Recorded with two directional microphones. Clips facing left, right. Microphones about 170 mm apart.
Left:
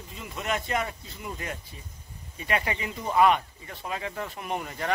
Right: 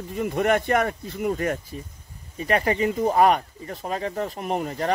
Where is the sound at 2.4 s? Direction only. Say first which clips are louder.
Right 8 dB; 40° right (ahead or behind).